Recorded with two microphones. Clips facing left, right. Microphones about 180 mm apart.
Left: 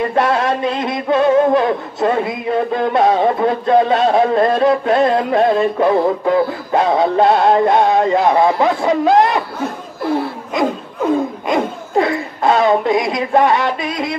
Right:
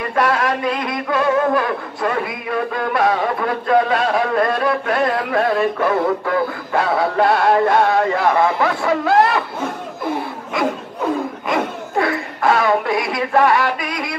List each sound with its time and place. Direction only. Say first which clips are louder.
0.1 s music: left 2 dB; 25° left (ahead or behind)
10.6 s music: left 3 dB; 20° left (ahead or behind)
11.4 s a woman's voice: left 3 dB; 20° left (ahead or behind)